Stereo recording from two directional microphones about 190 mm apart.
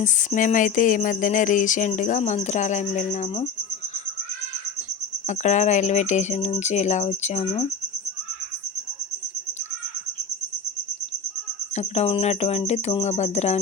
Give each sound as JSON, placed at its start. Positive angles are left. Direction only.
{"t": 0.0, "sound": "speech", "side_deg": 40}
{"t": 5.2, "sound": "speech", "side_deg": 40}
{"t": 11.7, "sound": "speech", "side_deg": 35}